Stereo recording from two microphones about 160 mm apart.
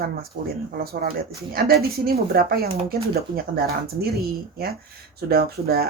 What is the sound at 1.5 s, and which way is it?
Speech, 70° right (ahead or behind).